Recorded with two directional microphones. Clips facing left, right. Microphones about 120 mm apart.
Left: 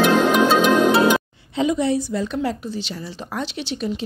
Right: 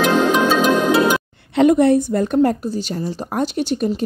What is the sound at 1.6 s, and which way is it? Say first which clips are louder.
A woman's voice: right 7 dB; 55° right (ahead or behind).